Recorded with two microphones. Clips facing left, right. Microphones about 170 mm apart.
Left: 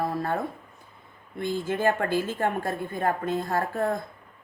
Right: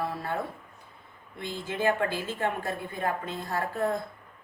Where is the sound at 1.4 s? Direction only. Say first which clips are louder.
Left 5 dB; 50° left (ahead or behind).